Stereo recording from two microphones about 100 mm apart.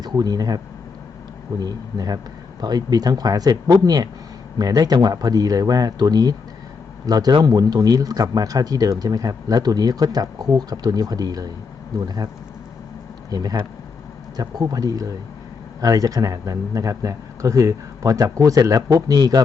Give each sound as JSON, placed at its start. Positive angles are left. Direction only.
{"t": 0.0, "sound": "speech", "side_deg": -40}
{"t": 13.3, "sound": "speech", "side_deg": -40}